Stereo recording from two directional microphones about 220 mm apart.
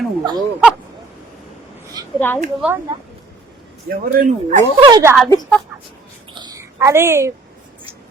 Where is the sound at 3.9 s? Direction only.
35° right (ahead or behind).